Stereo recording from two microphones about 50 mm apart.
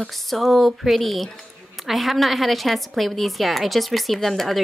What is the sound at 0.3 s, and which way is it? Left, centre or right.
A woman's voice, centre.